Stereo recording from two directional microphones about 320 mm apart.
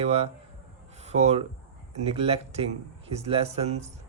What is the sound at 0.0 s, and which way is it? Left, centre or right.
Speech, centre.